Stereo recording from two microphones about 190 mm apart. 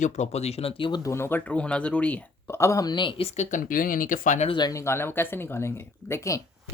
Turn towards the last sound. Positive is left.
turn(degrees=15)  # may be behind; listen again after turning